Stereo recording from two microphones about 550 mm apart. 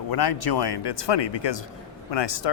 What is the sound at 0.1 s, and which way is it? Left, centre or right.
Speech, left.